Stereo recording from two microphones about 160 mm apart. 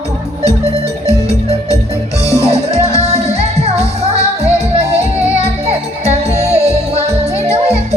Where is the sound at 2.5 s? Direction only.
40° right (ahead or behind).